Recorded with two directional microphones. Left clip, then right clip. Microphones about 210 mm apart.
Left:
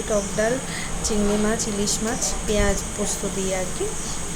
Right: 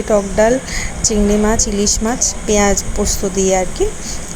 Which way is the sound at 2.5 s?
30° right (ahead or behind).